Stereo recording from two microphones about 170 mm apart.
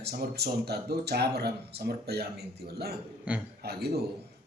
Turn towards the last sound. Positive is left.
turn(degrees=-70)  # may be behind; listen again after turning